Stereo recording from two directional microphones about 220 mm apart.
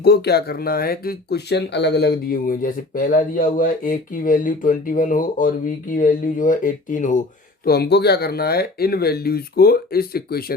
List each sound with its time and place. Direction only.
0.0 s speech: 45° left (ahead or behind)